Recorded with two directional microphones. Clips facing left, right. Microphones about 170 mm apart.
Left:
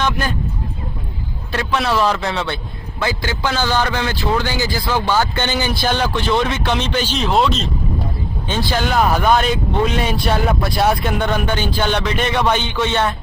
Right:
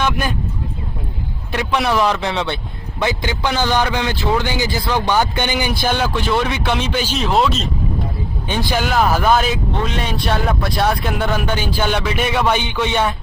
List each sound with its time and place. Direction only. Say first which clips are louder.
0.0 s speech: even; 15° right (ahead or behind)
1.5 s speech: right 1 dB; 15° right (ahead or behind)
8.4 s speech: even; 15° right (ahead or behind)
8.9 s speech: even; centre (ahead or behind)